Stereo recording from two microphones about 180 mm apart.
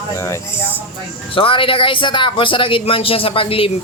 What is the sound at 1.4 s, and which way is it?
Speech, 30° left (ahead or behind).